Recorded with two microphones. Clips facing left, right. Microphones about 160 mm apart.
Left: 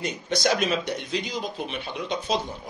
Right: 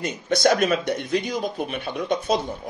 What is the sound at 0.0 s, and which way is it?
A man's voice, 50° right (ahead or behind).